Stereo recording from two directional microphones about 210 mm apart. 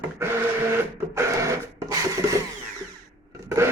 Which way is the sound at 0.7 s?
15° right (ahead or behind).